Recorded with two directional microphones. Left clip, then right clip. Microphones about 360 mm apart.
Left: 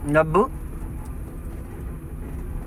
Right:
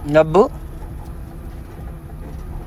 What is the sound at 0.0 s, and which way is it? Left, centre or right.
Speech, centre.